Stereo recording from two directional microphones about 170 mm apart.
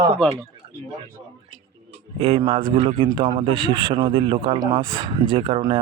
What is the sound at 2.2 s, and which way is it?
A man's voice, 35° right (ahead or behind).